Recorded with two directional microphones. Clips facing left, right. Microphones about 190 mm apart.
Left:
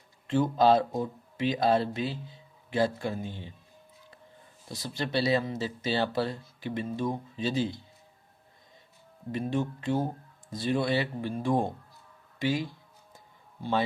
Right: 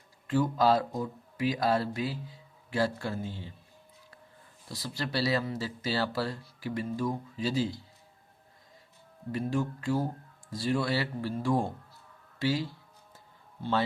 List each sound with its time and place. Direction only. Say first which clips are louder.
0.3 s speech: left 2 dB; 25° left (ahead or behind)
4.7 s speech: left 3 dB; 20° left (ahead or behind)
9.3 s speech: left 1 dB; 20° left (ahead or behind)
13.1 s a sound: even; 15° left (ahead or behind)